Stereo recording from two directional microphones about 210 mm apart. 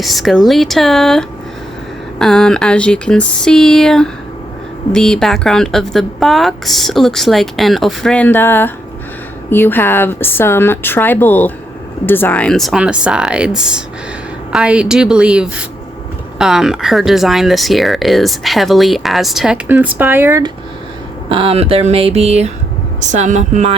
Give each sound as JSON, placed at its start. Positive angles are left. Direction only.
{"t": 0.0, "sound": "speech", "side_deg": 0}
{"t": 21.2, "sound": "a woman's voice", "side_deg": -25}